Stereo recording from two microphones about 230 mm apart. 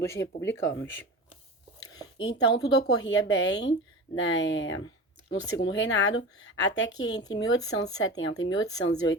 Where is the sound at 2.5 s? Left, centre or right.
Left.